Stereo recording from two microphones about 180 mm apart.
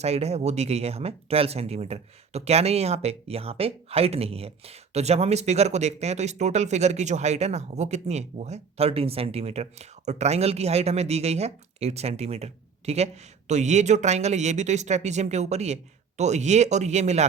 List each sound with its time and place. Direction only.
0.0 s speech: 35° right (ahead or behind)